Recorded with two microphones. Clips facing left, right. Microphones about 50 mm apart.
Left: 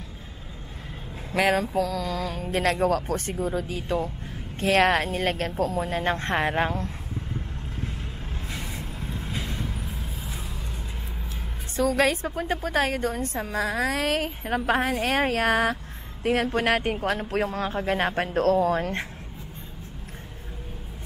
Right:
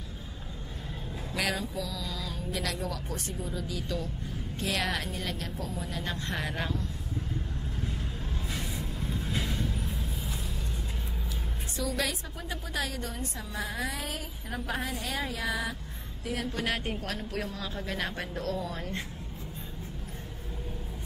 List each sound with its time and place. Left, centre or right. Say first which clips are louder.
1.3 s a woman's voice: left 10 dB; left
9.5 s vehicle: even; left
11.7 s a woman's voice: left 10 dB; left
16.3 s a woman's voice: left 10 dB; left